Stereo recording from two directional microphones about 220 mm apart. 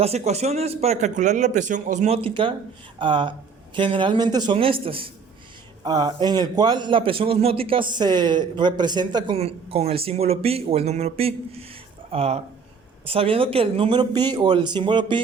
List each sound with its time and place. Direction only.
0.0 s a man's voice: 30° right (ahead or behind)